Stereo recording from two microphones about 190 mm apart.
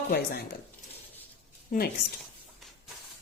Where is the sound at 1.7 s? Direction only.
45° left (ahead or behind).